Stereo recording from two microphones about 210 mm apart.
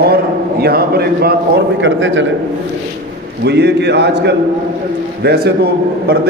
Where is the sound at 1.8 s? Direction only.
60° right (ahead or behind).